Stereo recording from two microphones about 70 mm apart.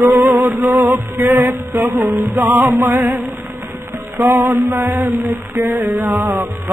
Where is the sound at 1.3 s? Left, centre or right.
Right.